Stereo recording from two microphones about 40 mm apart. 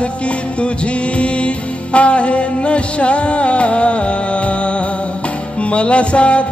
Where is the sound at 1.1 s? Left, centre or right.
Left.